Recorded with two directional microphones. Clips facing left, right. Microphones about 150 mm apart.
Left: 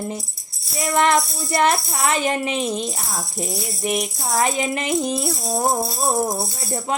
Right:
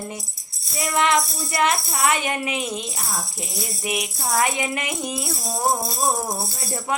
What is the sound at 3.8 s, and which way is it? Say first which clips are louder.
Music: left 4 dB; 40° left (ahead or behind).